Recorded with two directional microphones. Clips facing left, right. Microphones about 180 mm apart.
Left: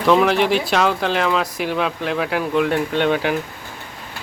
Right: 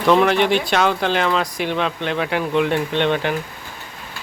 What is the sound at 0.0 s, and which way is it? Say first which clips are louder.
Speech: even; centre (ahead or behind).